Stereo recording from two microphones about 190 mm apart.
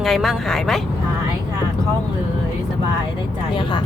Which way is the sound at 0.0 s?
Centre (ahead or behind).